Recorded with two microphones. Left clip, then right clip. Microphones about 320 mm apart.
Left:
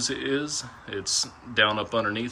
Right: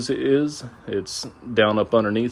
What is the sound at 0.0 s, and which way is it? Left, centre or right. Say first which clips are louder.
Speech: right 7 dB; centre.